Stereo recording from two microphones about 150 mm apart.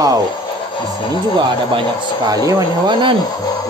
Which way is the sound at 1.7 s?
30° right (ahead or behind).